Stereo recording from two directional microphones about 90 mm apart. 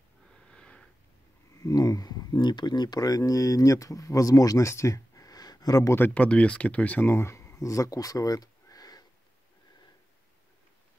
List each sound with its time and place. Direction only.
0.3 s sniff: 10° left (ahead or behind)
1.6 s speech: 40° left (ahead or behind)
5.9 s speech: 15° left (ahead or behind); by 9.0 s 45° left (ahead or behind)